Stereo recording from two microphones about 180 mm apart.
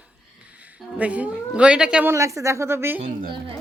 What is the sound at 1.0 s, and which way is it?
Speech, 10° right (ahead or behind).